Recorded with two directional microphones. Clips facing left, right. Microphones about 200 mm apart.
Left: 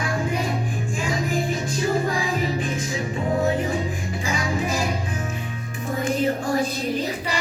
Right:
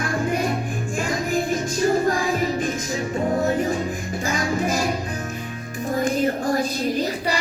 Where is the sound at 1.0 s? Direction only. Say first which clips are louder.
Right 1 dB; 45° right (ahead or behind).